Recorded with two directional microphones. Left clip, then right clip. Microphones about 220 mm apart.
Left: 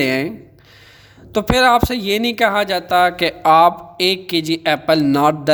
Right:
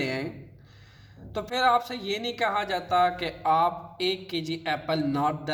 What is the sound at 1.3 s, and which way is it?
Speech, 50° left (ahead or behind).